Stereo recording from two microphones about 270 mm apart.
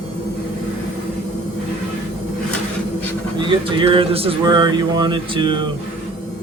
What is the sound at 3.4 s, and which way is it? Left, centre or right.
Speech, centre.